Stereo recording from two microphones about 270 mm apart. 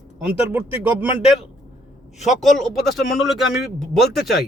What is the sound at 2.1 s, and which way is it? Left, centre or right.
Speech, left.